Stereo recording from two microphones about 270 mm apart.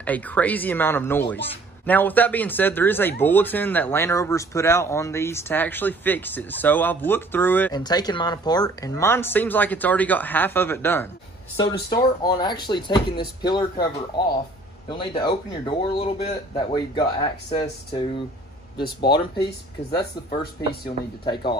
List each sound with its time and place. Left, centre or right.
0.0 s speech: centre
14.9 s speech: centre
19.4 s speech: left